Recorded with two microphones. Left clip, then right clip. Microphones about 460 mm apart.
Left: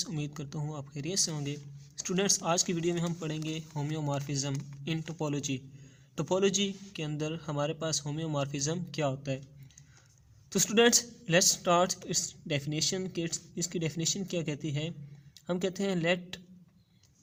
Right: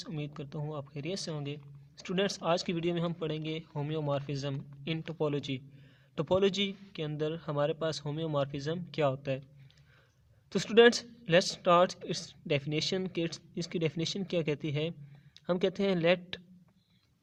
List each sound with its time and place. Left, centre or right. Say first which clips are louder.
0.0 s speech: left 3 dB; right
10.5 s speech: right 2 dB; right